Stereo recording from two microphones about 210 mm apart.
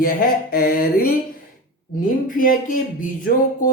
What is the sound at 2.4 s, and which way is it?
Speech, 40° left (ahead or behind).